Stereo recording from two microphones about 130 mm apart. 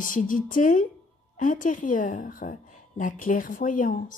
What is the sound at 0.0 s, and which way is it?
A woman's voice, 90° left.